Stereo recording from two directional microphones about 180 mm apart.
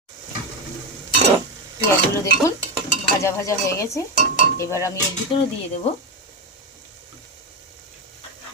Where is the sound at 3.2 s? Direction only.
15° left (ahead or behind).